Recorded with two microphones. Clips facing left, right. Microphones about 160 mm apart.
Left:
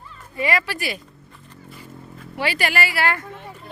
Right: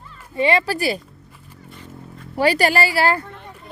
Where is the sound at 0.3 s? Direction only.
25° right (ahead or behind).